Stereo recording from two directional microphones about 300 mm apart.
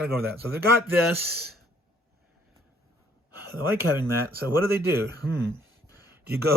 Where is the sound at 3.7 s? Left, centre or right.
Centre.